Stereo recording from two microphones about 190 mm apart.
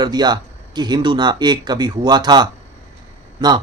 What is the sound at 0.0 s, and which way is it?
Speech, 20° right (ahead or behind).